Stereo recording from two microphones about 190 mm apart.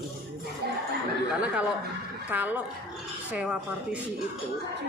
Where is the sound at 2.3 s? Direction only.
10° right (ahead or behind).